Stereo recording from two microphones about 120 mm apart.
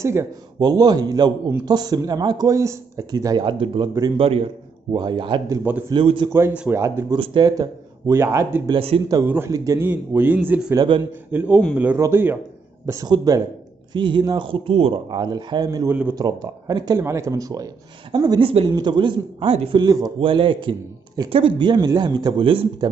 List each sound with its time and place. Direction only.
0.0 s a man's voice: 25° right (ahead or behind); by 5.4 s 40° right (ahead or behind)
5.6 s a man's voice: 15° right (ahead or behind)
6.0 s speech: 40° right (ahead or behind)
6.7 s a man's voice: 20° right (ahead or behind)
7.2 s a man's voice: 35° right (ahead or behind)
8.6 s a man's voice: 50° right (ahead or behind)
9.2 s a man's voice: 20° right (ahead or behind)
9.8 s a man's voice: 15° right (ahead or behind)
12.8 s speech: 30° right (ahead or behind)
15.9 s a man's voice: 15° right (ahead or behind)
16.2 s a man's voice: 35° right (ahead or behind); by 19.8 s 50° right (ahead or behind)
19.8 s speech: 35° right (ahead or behind)
20.2 s a man's voice: 45° right (ahead or behind)